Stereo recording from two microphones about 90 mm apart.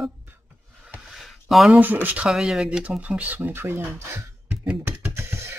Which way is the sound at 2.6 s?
15° right (ahead or behind).